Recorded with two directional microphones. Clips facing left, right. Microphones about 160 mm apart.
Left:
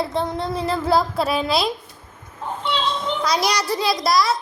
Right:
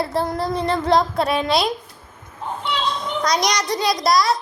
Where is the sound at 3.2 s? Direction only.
5° left (ahead or behind).